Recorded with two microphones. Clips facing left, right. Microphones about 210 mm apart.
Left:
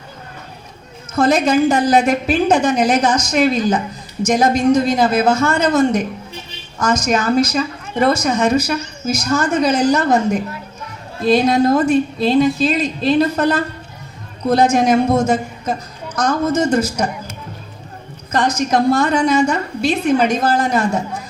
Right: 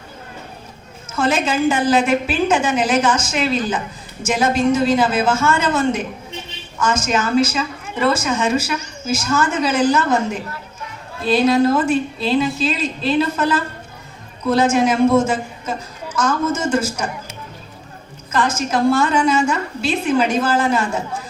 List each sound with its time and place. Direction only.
1.1 s a woman's voice: 40° left (ahead or behind)
18.3 s a woman's voice: 40° left (ahead or behind)